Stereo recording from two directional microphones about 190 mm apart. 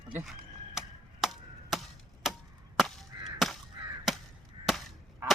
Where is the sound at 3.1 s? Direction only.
20° right (ahead or behind).